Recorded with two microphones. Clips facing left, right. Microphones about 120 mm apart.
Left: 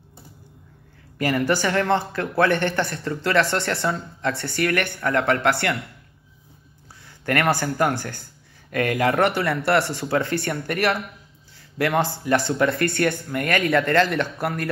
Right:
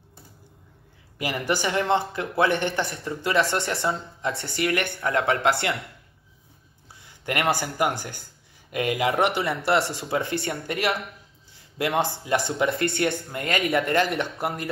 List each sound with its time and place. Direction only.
1.1 s a man's voice: 15° right (ahead or behind)
7.1 s a man's voice: 15° right (ahead or behind)
10.4 s speech: 60° left (ahead or behind)
11.8 s speech: 20° right (ahead or behind)